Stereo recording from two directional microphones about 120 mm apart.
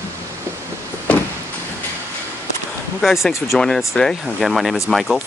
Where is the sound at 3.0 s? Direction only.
Centre (ahead or behind).